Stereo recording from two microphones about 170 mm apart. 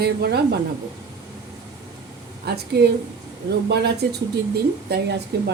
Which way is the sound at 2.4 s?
70° right (ahead or behind).